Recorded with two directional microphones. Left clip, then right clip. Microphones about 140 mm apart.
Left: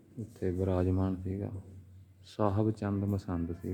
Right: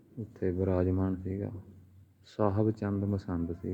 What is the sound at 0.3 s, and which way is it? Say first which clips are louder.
Speech: right 2 dB; 5° left (ahead or behind).